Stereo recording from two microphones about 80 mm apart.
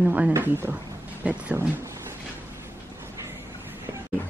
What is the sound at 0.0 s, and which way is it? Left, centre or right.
A woman's voice, centre.